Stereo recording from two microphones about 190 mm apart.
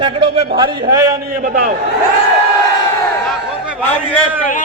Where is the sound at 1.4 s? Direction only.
45° right (ahead or behind).